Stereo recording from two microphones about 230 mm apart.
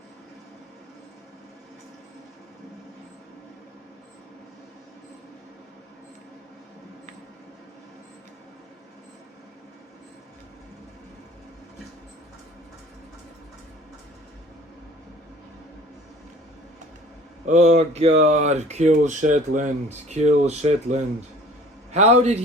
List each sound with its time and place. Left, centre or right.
17.4 s speech: right